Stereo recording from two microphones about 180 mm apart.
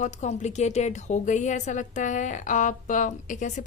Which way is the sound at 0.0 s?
40° left (ahead or behind).